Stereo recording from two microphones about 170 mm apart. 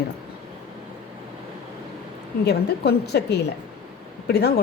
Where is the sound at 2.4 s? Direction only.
75° left (ahead or behind).